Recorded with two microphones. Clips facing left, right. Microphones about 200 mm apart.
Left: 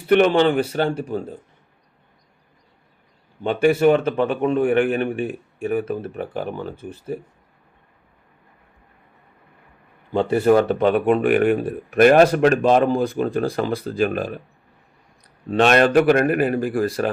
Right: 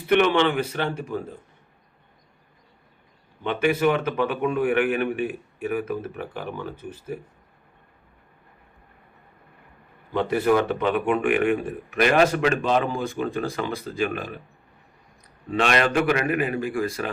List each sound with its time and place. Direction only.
0.1 s speech: 35° left (ahead or behind)
3.4 s a man's voice: 30° left (ahead or behind)
10.1 s speech: 30° left (ahead or behind)
15.4 s speech: 40° left (ahead or behind)